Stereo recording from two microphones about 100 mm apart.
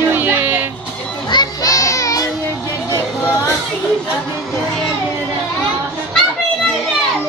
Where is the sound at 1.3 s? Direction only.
40° left (ahead or behind).